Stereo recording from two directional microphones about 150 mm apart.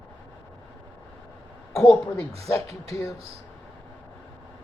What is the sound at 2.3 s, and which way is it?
Speech, 40° right (ahead or behind).